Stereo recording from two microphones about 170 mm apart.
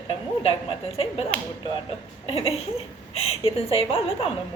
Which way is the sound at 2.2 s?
35° left (ahead or behind).